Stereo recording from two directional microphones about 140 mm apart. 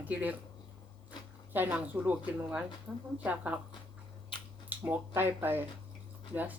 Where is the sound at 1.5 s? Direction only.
15° right (ahead or behind).